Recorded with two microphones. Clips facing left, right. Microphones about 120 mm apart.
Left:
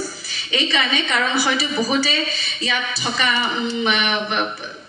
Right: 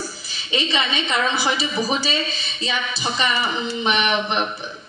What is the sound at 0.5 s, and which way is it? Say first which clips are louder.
Speech: left 1 dB; 30° right (ahead or behind).